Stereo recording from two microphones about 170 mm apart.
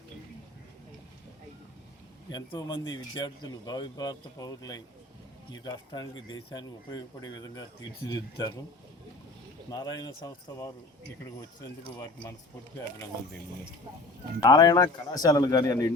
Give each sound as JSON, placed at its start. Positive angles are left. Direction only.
{"t": 2.3, "sound": "speech", "side_deg": 25}
{"t": 9.6, "sound": "speech", "side_deg": 25}
{"t": 14.4, "sound": "speech", "side_deg": 20}